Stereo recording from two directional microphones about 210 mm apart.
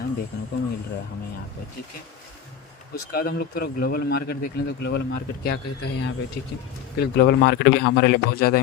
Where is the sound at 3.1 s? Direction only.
45° left (ahead or behind).